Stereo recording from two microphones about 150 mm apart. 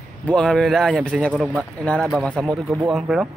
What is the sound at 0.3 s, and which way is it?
A man's voice, 5° left (ahead or behind).